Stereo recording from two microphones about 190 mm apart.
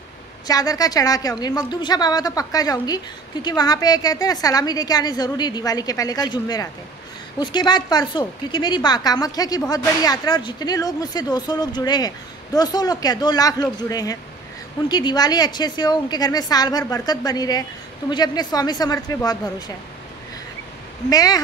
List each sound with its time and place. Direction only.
0.5 s a woman's voice: 20° left (ahead or behind)
21.1 s a woman's voice: 20° left (ahead or behind)